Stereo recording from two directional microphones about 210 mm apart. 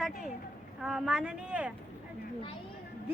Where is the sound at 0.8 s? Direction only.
5° right (ahead or behind).